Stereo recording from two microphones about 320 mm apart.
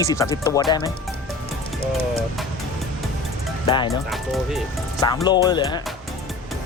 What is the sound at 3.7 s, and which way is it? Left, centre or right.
Speech, centre.